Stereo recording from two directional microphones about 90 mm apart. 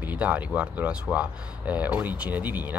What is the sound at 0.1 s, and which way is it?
Speech, 15° right (ahead or behind).